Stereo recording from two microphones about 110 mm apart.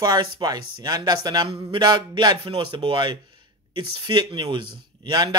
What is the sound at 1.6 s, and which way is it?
A man's voice, 50° right (ahead or behind).